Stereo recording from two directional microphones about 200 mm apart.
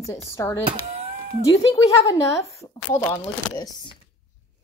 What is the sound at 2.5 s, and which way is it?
Speech, 15° left (ahead or behind).